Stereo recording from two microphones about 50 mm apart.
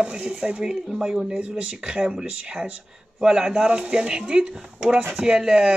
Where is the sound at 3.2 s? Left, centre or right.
Centre.